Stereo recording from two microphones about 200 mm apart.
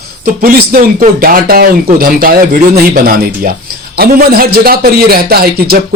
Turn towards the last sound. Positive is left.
turn(degrees=-50)  # may be behind; listen again after turning